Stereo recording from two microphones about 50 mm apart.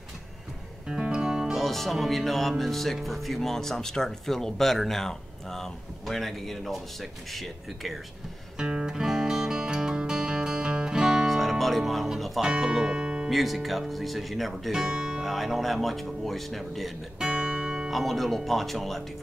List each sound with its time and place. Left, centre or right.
0.8 s music: centre
1.6 s speech: centre
8.5 s music: centre
11.2 s music: centre
13.3 s speech: centre
14.7 s guitar: centre
15.2 s speech: centre
17.2 s music: centre
17.8 s speech: centre